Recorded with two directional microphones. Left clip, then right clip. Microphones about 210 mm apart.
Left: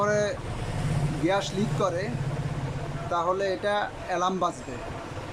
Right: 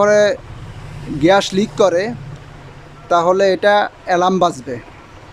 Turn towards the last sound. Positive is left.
turn(degrees=-45)  # may be behind; listen again after turning